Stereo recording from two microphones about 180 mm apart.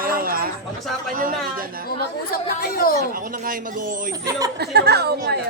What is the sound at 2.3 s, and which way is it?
Speech, 55° left (ahead or behind).